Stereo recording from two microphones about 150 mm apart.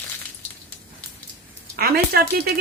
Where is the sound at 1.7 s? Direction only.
90° right.